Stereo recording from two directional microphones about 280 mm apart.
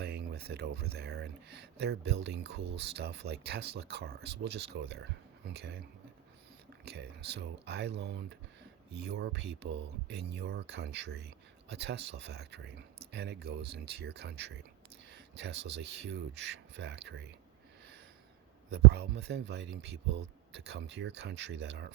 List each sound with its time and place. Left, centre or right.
0.0 s speech: right
6.8 s speech: right
18.7 s speech: right